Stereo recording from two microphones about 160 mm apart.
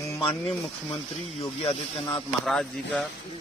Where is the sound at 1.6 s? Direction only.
35° left (ahead or behind).